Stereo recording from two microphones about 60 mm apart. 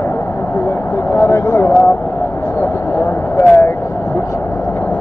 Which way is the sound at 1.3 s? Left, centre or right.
Left.